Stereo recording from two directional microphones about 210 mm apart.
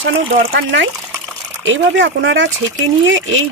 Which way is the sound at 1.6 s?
65° right (ahead or behind).